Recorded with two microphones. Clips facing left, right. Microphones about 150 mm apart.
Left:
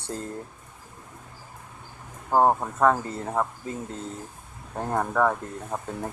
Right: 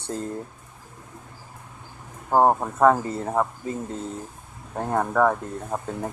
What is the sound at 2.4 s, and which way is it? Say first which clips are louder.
Speech: right 2 dB; 15° right (ahead or behind).